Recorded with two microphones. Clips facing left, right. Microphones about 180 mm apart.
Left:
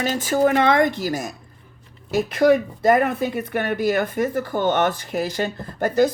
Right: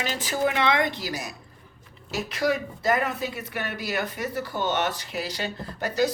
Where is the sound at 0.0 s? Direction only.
45° left (ahead or behind).